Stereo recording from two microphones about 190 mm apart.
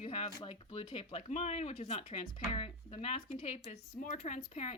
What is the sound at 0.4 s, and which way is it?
Speech, 30° left (ahead or behind).